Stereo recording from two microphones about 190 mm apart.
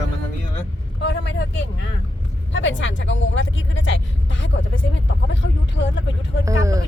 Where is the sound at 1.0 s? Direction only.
70° left (ahead or behind).